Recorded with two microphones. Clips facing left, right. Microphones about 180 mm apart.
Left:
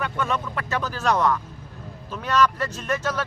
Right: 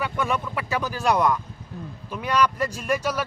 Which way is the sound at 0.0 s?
10° right (ahead or behind).